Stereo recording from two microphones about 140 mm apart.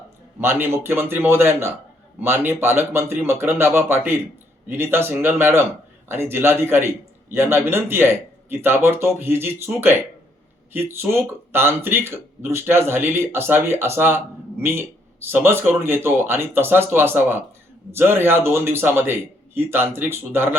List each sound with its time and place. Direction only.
0.3 s a man's voice: 15° right (ahead or behind)